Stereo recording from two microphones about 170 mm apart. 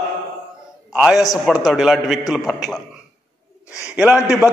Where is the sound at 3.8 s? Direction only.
5° right (ahead or behind).